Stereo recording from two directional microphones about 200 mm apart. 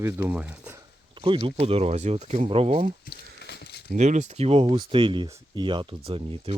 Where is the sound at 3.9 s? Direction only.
35° right (ahead or behind).